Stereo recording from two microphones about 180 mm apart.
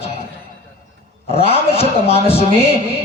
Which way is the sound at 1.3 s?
35° left (ahead or behind).